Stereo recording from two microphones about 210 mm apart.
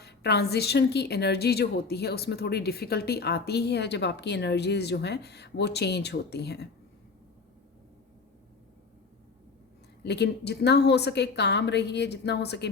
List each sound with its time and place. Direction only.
0.0 s a woman's voice: 50° left (ahead or behind)
10.0 s a woman's voice: 50° left (ahead or behind)